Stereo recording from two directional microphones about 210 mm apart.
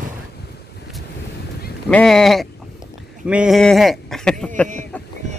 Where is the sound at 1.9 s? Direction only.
5° left (ahead or behind).